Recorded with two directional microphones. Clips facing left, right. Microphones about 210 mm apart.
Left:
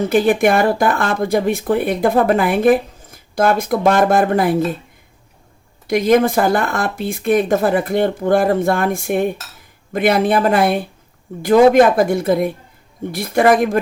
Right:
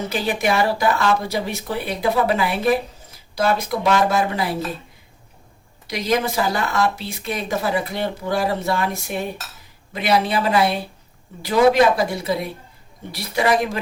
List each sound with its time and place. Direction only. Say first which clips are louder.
0.1 s speech: left 8 dB; 50° left (ahead or behind)
5.9 s speech: left 8 dB; 50° left (ahead or behind)